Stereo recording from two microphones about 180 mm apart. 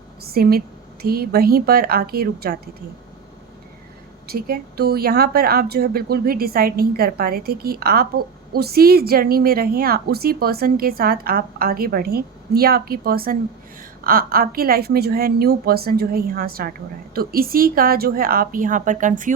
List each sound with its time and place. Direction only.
0.2 s a woman's voice: 60° right (ahead or behind)
4.3 s speech: 55° right (ahead or behind)